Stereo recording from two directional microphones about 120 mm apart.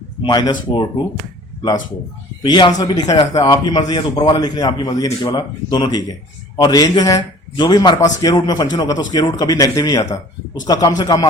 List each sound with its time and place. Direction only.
0.2 s a man's voice: 40° left (ahead or behind)
2.4 s a man's voice: 35° left (ahead or behind)